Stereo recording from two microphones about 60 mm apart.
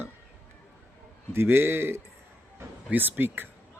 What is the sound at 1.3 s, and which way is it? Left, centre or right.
Speech, right.